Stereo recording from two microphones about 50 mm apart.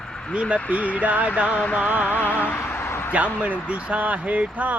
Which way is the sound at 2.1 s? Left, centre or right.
Left.